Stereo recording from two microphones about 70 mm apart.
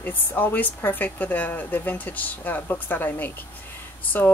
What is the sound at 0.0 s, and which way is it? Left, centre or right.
Speech, left.